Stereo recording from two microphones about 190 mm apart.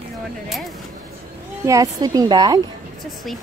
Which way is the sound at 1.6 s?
15° right (ahead or behind).